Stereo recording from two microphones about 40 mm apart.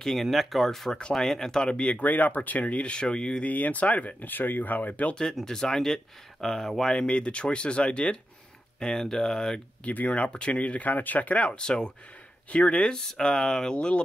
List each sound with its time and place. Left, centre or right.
0.0 s speech: centre; by 2.0 s left
2.0 s speech: left
3.4 s speech: left
4.2 s speech: left
5.4 s speech: centre
7.1 s speech: left
9.8 s speech: left
11.4 s speech: left